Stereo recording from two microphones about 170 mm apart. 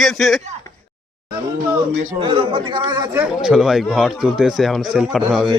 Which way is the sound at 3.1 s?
5° right (ahead or behind).